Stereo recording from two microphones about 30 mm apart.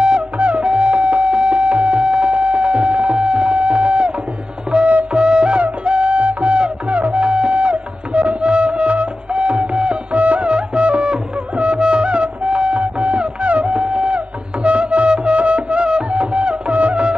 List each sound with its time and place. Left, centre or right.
0.4 s music: right
2.0 s a sound: right
4.7 s wind instrument: right
5.1 s music: right
10.1 s music: right